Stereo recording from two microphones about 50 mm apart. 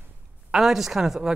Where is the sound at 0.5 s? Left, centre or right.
Centre.